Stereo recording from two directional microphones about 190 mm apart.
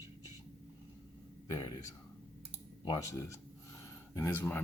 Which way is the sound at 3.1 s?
15° left (ahead or behind).